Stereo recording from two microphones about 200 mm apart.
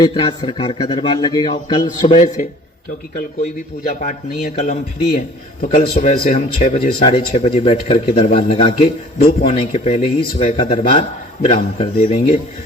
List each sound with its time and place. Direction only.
0.0 s speech: 25° left (ahead or behind)
2.1 s speech: 40° left (ahead or behind)
4.5 s speech: 35° left (ahead or behind)
7.1 s speech: 30° left (ahead or behind)